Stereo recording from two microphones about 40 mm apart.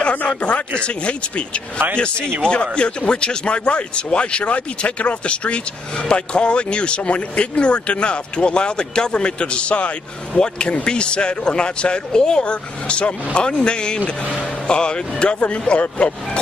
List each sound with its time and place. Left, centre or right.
0.0 s speech: left
10.3 s speech: centre